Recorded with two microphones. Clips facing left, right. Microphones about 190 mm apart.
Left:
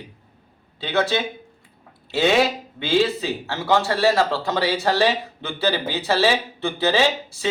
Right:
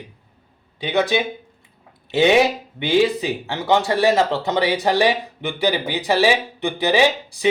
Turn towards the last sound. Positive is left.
turn(degrees=-15)  # may be behind; listen again after turning